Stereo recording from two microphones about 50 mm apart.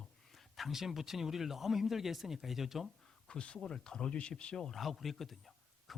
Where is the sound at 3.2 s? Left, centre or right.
Centre.